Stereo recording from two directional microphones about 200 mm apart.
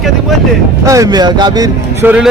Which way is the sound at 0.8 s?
15° right (ahead or behind).